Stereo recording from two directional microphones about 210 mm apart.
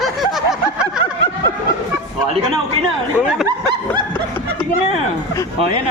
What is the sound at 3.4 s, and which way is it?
Snicker, 20° right (ahead or behind).